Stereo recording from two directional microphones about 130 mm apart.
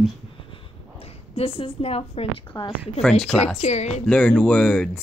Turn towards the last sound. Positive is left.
turn(degrees=5)  # may be behind; listen again after turning